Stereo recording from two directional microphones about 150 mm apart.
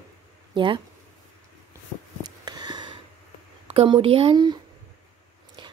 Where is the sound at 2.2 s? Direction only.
25° right (ahead or behind).